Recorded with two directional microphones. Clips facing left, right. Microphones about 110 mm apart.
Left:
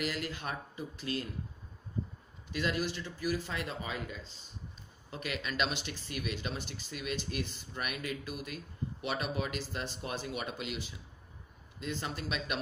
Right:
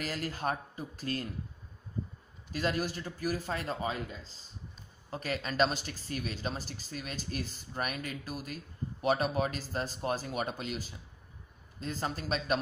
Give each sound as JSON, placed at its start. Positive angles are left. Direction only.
{"t": 0.0, "sound": "speech", "side_deg": -40}
{"t": 2.5, "sound": "speech", "side_deg": -45}